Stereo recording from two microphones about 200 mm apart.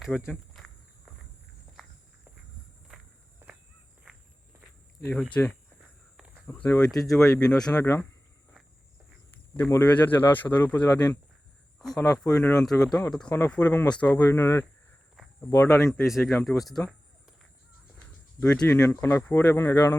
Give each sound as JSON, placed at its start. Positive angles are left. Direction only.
{"t": 0.1, "sound": "speech", "side_deg": 5}
{"t": 0.6, "sound": "walk", "side_deg": 0}
{"t": 4.9, "sound": "speech", "side_deg": 10}
{"t": 6.1, "sound": "walk", "side_deg": -5}
{"t": 6.5, "sound": "speech", "side_deg": 10}
{"t": 9.6, "sound": "speech", "side_deg": 10}
{"t": 11.9, "sound": "speech", "side_deg": 15}
{"t": 16.0, "sound": "speech", "side_deg": 0}
{"t": 18.3, "sound": "speech", "side_deg": 5}